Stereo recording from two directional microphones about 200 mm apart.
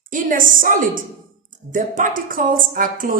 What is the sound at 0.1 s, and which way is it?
A woman's voice, 40° right (ahead or behind).